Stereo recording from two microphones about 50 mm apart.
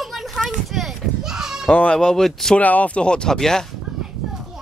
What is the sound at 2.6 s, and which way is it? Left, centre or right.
Speech, left.